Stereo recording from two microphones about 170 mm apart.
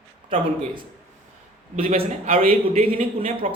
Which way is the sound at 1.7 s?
35° right (ahead or behind).